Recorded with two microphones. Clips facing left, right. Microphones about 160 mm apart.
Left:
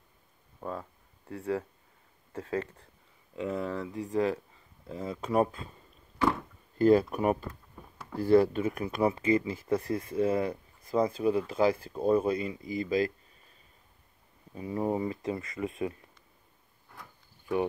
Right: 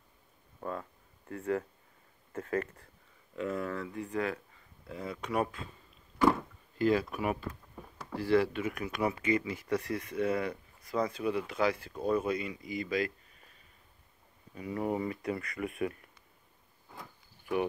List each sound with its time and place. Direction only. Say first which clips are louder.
0.6 s speech: left 1 dB; 5° left (ahead or behind)
3.3 s speech: left 2 dB; 20° left (ahead or behind)
4.0 s speech: left 7 dB; 35° left (ahead or behind)
6.8 s speech: left 6 dB; 45° left (ahead or behind)
14.5 s speech: left 3 dB; 30° left (ahead or behind)